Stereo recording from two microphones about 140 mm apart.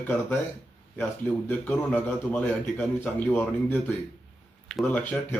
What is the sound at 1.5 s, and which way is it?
A man's voice, 10° left (ahead or behind).